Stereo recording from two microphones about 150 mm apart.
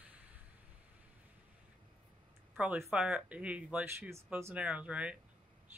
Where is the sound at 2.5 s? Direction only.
10° right (ahead or behind).